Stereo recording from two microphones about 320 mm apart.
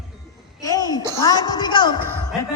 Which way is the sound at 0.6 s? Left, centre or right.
Centre.